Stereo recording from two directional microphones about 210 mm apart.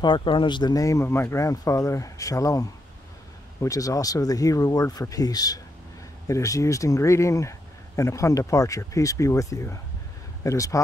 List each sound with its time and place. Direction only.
0.0 s speech: 25° left (ahead or behind)